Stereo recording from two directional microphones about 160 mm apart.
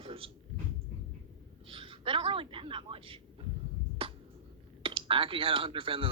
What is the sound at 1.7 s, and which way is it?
A woman's voice, 35° right (ahead or behind).